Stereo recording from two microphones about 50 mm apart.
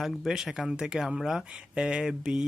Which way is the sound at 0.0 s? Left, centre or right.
Centre.